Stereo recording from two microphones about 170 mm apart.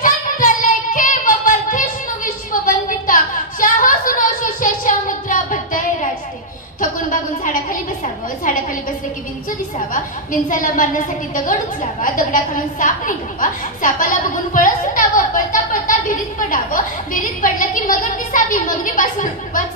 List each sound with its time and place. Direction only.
0.0 s child singing: 50° left (ahead or behind)
2.2 s a sound: 55° left (ahead or behind)
8.5 s a woman's voice: 50° left (ahead or behind)
9.9 s a woman's voice: 50° left (ahead or behind)